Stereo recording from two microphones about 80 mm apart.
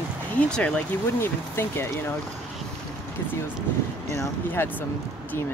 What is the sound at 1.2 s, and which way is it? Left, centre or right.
Speech, left.